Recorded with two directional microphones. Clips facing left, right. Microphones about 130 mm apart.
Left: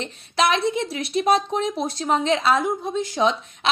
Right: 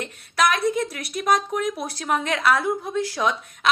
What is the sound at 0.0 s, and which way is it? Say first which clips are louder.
A woman's voice: left 1 dB; 25° left (ahead or behind).